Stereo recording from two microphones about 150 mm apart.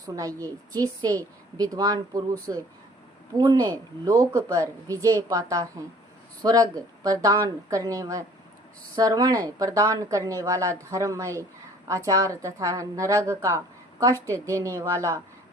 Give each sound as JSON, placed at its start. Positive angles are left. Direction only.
{"t": 0.2, "sound": "speech", "side_deg": -25}